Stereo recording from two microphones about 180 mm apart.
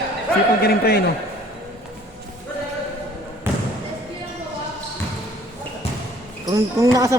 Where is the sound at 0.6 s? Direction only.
60° left (ahead or behind).